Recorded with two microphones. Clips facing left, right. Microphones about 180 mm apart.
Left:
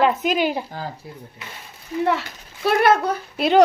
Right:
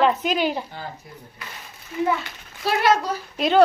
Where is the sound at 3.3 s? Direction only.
10° left (ahead or behind).